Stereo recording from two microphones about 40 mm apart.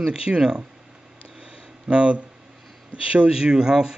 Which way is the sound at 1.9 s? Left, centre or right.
Right.